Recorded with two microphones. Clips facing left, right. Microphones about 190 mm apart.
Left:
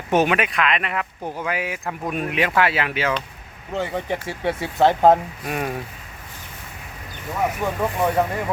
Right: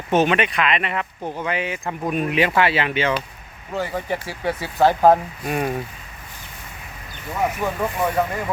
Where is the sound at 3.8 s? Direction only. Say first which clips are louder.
Even; 25° left (ahead or behind).